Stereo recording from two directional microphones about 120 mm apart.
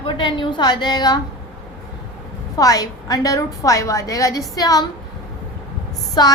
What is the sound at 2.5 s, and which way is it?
A woman's voice, 30° left (ahead or behind).